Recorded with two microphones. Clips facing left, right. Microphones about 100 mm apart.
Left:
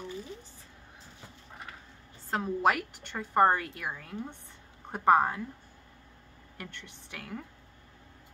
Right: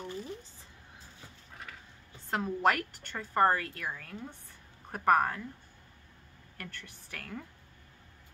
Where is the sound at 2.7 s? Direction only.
15° left (ahead or behind).